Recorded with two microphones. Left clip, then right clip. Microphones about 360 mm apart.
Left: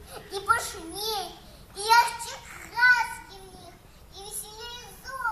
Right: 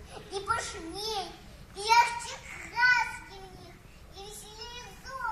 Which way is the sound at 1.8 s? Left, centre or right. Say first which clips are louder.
Left 3 dB; centre.